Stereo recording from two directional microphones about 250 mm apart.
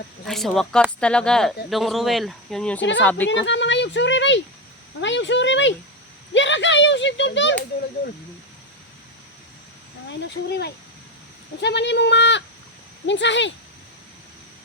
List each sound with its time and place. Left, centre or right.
0.3 s speech: centre
3.2 s speech: left
10.1 s speech: left